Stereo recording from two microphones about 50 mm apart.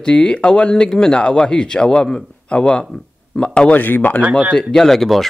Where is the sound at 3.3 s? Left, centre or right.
Centre.